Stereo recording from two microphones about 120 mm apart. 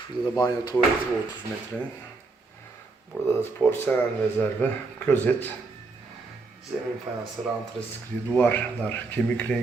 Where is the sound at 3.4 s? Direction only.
15° left (ahead or behind).